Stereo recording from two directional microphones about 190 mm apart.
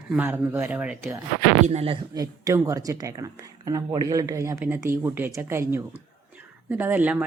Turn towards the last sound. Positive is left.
turn(degrees=-10)  # may be behind; listen again after turning